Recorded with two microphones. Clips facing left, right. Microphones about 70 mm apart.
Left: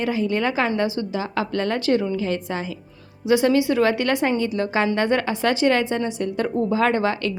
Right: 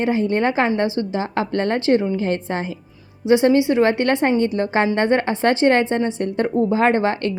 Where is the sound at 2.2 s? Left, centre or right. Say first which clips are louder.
Right 3 dB; right.